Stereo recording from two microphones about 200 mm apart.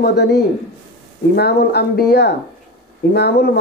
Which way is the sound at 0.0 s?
55° left (ahead or behind).